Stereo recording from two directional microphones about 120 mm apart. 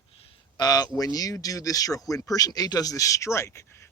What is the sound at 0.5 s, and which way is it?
Speech, 35° left (ahead or behind).